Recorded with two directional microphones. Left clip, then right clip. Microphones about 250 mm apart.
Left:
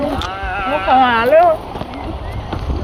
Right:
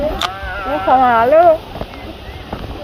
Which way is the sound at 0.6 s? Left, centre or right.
Centre.